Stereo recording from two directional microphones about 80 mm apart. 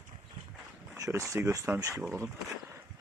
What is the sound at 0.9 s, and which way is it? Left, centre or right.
Speech, right.